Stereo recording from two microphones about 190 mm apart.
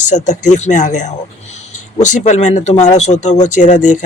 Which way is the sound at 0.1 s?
40° left (ahead or behind).